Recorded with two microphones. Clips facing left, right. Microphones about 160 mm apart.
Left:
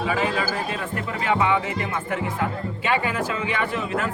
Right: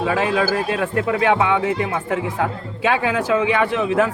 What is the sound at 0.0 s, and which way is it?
A man's voice, 80° right.